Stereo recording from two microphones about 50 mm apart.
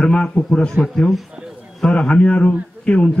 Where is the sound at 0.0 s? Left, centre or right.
Left.